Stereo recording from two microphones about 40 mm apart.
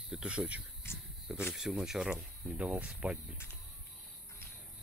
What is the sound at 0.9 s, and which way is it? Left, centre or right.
Cricket, left.